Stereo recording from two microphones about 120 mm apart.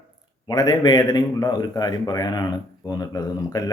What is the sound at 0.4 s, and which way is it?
A man's voice, 35° left (ahead or behind).